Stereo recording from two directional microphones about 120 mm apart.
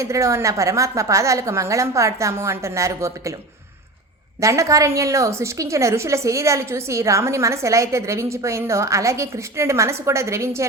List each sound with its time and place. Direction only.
0.0 s a woman's voice: 25° right (ahead or behind)
4.4 s a woman's voice: 25° right (ahead or behind)